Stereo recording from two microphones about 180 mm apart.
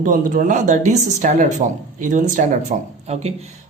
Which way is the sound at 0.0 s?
50° right (ahead or behind).